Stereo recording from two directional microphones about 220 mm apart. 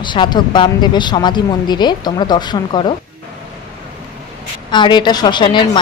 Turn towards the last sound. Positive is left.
turn(degrees=20)  # may be behind; listen again after turning